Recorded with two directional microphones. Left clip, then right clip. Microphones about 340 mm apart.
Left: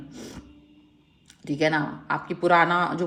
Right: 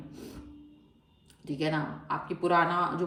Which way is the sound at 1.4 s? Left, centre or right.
Left.